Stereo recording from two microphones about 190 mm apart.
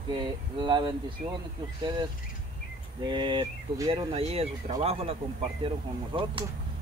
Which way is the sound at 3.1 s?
25° right (ahead or behind).